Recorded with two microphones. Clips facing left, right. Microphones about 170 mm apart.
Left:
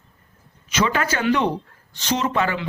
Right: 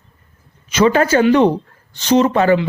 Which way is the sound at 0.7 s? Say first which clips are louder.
Right 9 dB; 35° right (ahead or behind).